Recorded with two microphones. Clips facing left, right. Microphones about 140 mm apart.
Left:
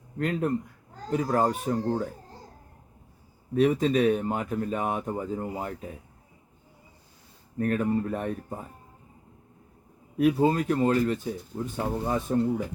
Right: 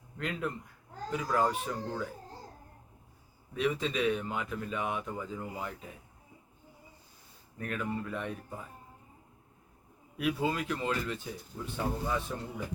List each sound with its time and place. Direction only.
0.2 s speech: 45° left (ahead or behind)
3.5 s speech: 45° left (ahead or behind)
7.6 s speech: 40° left (ahead or behind)
10.2 s speech: 40° left (ahead or behind)